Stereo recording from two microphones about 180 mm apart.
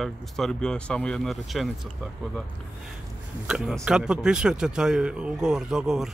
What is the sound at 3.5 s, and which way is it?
Speech, centre (ahead or behind).